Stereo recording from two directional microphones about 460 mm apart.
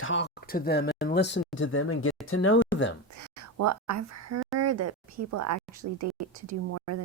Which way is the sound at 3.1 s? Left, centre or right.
Right.